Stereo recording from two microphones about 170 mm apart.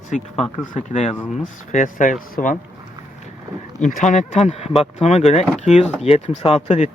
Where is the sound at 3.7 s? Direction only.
45° left (ahead or behind).